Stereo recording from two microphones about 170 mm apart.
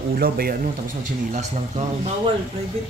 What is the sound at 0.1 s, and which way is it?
Speech, 60° right (ahead or behind).